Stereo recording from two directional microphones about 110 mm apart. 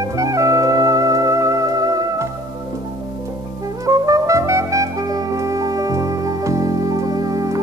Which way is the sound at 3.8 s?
30° right (ahead or behind).